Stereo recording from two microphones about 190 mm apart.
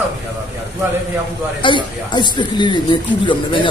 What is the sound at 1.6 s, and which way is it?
Speech, 25° left (ahead or behind).